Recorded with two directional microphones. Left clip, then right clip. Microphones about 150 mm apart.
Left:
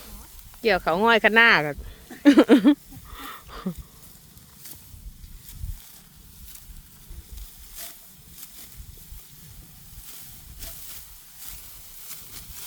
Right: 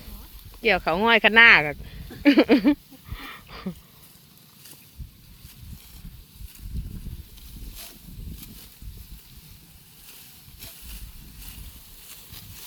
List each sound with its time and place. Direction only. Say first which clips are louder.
0.6 s speech: left 1 dB; 35° left (ahead or behind)
1.8 s a sound: left 2 dB; 30° left (ahead or behind)
10.8 s vehicle: left 1 dB; 20° left (ahead or behind)